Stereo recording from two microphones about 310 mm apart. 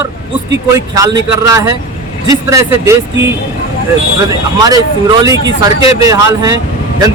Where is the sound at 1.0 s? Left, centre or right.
Centre.